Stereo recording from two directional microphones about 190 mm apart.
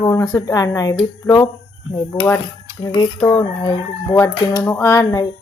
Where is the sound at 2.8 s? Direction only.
25° left (ahead or behind).